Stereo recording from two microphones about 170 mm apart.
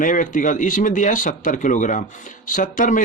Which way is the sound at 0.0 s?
50° left (ahead or behind).